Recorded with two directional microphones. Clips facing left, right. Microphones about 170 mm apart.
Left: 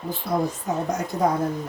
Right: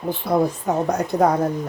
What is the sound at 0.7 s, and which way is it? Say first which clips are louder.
Speech: right 3 dB; 60° right (ahead or behind).